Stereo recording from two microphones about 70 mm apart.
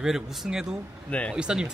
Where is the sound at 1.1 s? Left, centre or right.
Centre.